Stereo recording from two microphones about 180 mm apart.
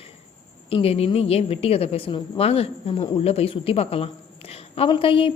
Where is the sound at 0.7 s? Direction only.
35° left (ahead or behind).